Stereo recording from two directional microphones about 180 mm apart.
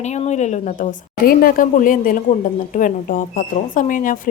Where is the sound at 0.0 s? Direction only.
40° left (ahead or behind).